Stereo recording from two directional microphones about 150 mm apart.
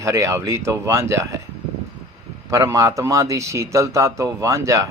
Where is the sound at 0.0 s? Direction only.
20° right (ahead or behind).